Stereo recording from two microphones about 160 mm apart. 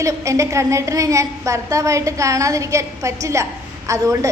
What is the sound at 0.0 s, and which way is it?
A woman's voice, 20° right (ahead or behind).